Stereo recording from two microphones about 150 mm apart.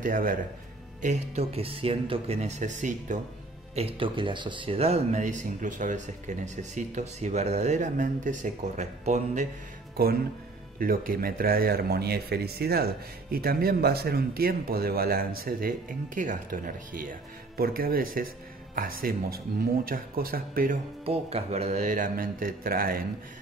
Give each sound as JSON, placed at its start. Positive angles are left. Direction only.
{"t": 0.0, "sound": "speech", "side_deg": -65}
{"t": 1.0, "sound": "speech", "side_deg": -50}
{"t": 3.7, "sound": "speech", "side_deg": -40}
{"t": 10.0, "sound": "speech", "side_deg": -90}
{"t": 10.8, "sound": "speech", "side_deg": -75}
{"t": 16.2, "sound": "speech", "side_deg": -65}
{"t": 21.0, "sound": "speech", "side_deg": -40}